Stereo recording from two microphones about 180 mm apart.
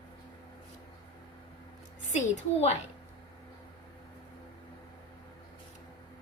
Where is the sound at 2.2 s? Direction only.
40° left (ahead or behind).